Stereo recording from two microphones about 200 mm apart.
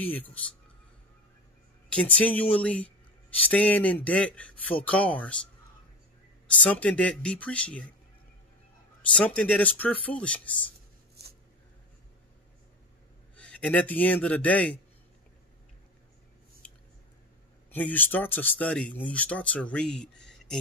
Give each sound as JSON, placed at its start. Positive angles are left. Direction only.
{"t": 0.0, "sound": "speech", "side_deg": 10}
{"t": 1.9, "sound": "speech", "side_deg": 5}
{"t": 6.4, "sound": "speech", "side_deg": 5}
{"t": 9.1, "sound": "speech", "side_deg": 5}
{"t": 11.2, "sound": "a sound", "side_deg": -55}
{"t": 13.4, "sound": "a man's voice", "side_deg": 5}
{"t": 16.6, "sound": "squish", "side_deg": 5}
{"t": 17.6, "sound": "speech", "side_deg": 10}